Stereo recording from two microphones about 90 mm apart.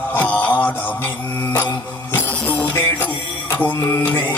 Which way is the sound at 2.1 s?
20° left (ahead or behind).